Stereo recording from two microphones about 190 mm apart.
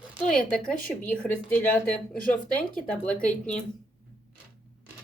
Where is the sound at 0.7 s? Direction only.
45° left (ahead or behind).